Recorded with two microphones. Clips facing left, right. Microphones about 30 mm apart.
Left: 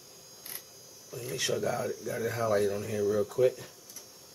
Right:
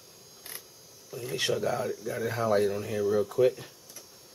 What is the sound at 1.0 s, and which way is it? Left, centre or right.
Speech, centre.